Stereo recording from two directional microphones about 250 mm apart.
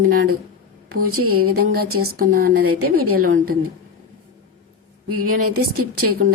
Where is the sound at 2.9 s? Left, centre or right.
Right.